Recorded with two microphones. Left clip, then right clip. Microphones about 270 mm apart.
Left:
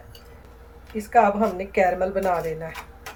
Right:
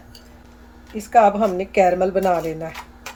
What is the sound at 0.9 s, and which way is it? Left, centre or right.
Speech, right.